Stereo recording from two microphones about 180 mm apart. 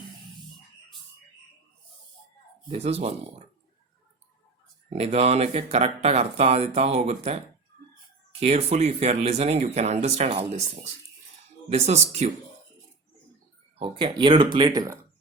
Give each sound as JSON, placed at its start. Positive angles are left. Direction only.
{"t": 2.6, "sound": "speech", "side_deg": -35}
{"t": 4.9, "sound": "speech", "side_deg": -35}
{"t": 8.4, "sound": "speech", "side_deg": -35}
{"t": 11.7, "sound": "speech", "side_deg": -35}
{"t": 13.7, "sound": "speech", "side_deg": -30}